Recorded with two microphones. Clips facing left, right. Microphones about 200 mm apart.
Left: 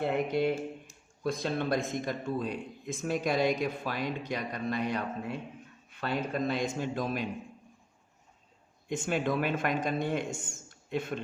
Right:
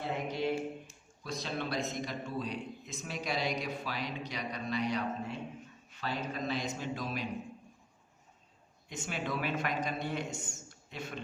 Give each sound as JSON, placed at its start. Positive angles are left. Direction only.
{"t": 0.0, "sound": "a man's voice", "side_deg": 60}
{"t": 8.9, "sound": "a man's voice", "side_deg": 50}